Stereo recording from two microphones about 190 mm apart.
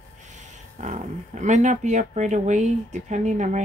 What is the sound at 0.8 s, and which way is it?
Speech, 40° right (ahead or behind).